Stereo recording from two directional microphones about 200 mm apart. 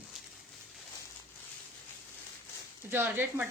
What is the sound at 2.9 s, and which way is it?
Speech, 10° right (ahead or behind).